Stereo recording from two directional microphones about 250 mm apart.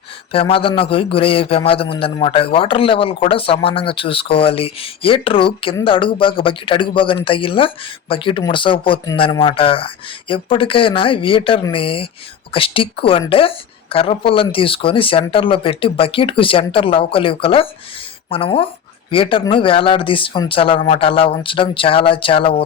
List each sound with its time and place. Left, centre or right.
0.3 s a man's voice: left